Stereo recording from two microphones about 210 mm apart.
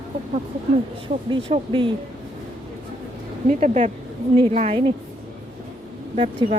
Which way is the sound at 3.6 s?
30° right (ahead or behind).